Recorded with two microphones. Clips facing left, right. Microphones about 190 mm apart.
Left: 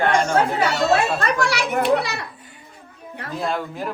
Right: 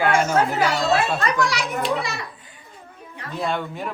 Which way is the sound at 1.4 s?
60° left (ahead or behind).